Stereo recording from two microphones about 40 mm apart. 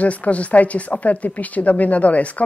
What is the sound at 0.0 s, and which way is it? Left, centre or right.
Speech, left.